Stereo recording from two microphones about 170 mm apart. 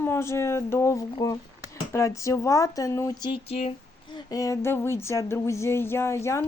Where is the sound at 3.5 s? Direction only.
35° left (ahead or behind).